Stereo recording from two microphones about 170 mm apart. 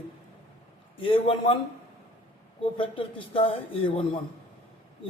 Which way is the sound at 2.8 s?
30° left (ahead or behind).